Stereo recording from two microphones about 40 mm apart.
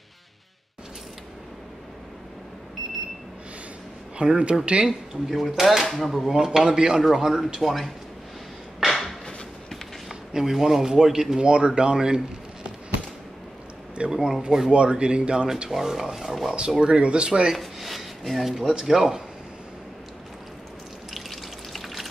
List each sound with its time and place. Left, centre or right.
4.2 s speech: right
4.8 s speech: centre
8.7 s a sound: centre
10.3 s speech: centre
11.4 s speech: right
14.1 s speech: centre
14.7 s speech: right
15.7 s speech: centre
16.8 s speech: right
17.6 s a sound: centre
18.9 s speech: centre
21.1 s water: centre